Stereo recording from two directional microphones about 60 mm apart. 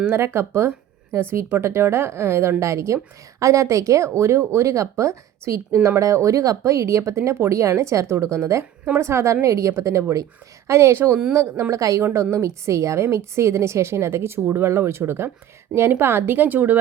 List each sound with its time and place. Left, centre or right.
0.0 s a woman's voice: right
5.7 s speech: right
6.0 s a woman's voice: right
11.7 s a woman's voice: right